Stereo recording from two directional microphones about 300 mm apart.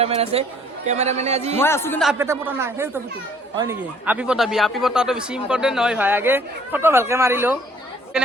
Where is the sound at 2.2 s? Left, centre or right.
Centre.